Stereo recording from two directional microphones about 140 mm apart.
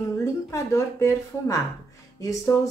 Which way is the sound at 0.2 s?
20° left (ahead or behind).